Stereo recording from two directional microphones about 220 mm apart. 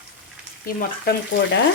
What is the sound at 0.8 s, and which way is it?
Speech, 45° left (ahead or behind).